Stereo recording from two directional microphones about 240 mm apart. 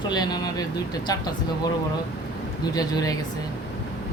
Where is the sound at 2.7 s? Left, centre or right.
Centre.